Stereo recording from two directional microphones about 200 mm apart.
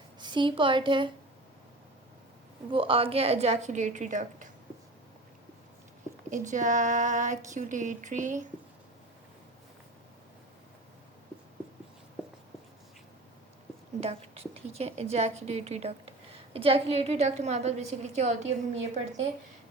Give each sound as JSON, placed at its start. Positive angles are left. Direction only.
{"t": 0.2, "sound": "a woman's voice", "side_deg": -25}
{"t": 2.7, "sound": "a woman's voice", "side_deg": -25}
{"t": 6.3, "sound": "a woman's voice", "side_deg": -40}
{"t": 14.0, "sound": "a woman's voice", "side_deg": -30}